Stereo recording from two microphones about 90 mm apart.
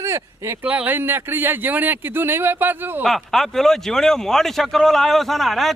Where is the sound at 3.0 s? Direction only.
Centre (ahead or behind).